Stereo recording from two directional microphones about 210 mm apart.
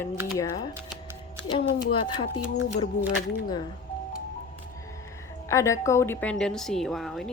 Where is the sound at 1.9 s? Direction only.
25° left (ahead or behind).